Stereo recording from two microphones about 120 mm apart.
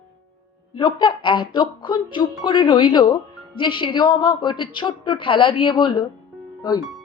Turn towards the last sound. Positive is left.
turn(degrees=35)  # may be behind; listen again after turning